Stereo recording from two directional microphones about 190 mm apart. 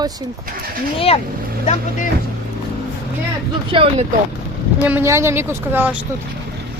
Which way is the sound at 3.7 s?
30° right (ahead or behind).